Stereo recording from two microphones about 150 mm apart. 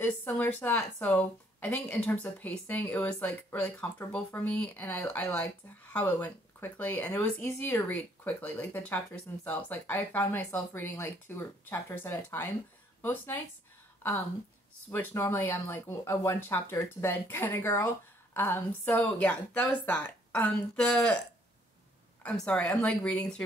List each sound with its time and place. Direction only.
0.0 s speech: 15° left (ahead or behind)
14.9 s speech: 15° left (ahead or behind)
22.2 s speech: 5° left (ahead or behind)